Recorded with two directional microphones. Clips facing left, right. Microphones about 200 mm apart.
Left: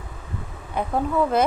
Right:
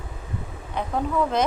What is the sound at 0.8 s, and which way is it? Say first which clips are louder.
Speech: left 3 dB; 10° left (ahead or behind).